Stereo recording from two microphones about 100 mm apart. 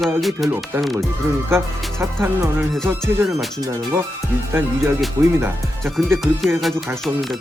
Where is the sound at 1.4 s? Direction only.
25° right (ahead or behind).